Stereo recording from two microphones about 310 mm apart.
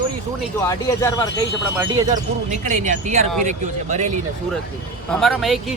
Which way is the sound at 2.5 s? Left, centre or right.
Right.